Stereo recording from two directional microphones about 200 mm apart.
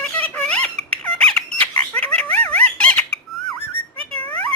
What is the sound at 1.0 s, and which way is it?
Squeak, 5° left (ahead or behind).